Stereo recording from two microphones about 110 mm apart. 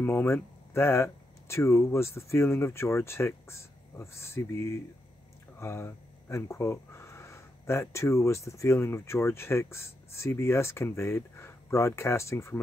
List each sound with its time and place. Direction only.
0.0 s speech: 25° left (ahead or behind)